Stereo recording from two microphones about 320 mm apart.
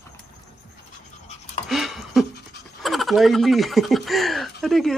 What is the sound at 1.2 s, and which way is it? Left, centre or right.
Dog, centre.